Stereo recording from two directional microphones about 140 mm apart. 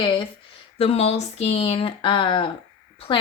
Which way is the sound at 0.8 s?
50° left (ahead or behind).